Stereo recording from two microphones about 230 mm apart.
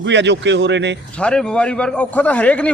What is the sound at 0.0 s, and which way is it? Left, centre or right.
Speech, right.